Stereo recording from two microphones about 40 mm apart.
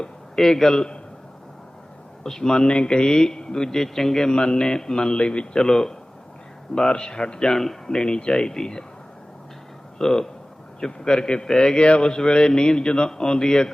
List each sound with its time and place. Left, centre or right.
0.3 s a man's voice: centre
2.2 s a man's voice: centre
5.6 s a man's voice: centre
10.0 s a man's voice: centre